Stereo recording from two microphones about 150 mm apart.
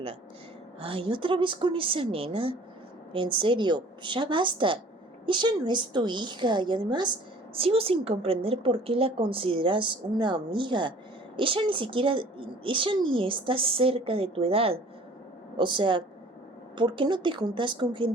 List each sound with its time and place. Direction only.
0.8 s a woman's voice: 35° right (ahead or behind)